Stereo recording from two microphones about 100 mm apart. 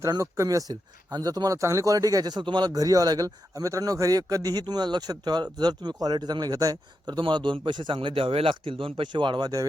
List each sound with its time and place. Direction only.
0.1 s speech: 35° right (ahead or behind)
7.2 s a man's voice: 50° right (ahead or behind)